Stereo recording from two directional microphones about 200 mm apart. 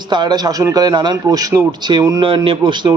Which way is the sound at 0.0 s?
20° right (ahead or behind).